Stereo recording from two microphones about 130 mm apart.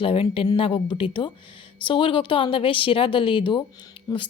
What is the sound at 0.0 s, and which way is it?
A woman's voice, 45° left (ahead or behind).